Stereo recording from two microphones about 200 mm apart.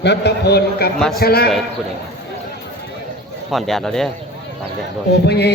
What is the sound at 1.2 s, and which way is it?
Speech, 50° left (ahead or behind).